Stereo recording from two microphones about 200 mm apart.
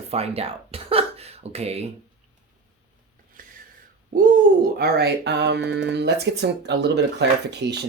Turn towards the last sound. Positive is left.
turn(degrees=-55)  # may be behind; listen again after turning